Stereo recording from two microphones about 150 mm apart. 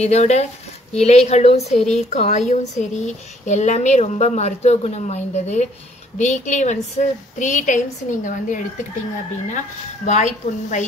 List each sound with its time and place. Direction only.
0.0 s a woman's voice: 45° left (ahead or behind)
10.0 s speech: 50° left (ahead or behind)